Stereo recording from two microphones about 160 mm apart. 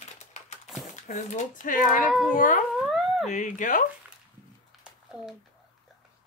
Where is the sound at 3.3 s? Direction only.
50° left (ahead or behind).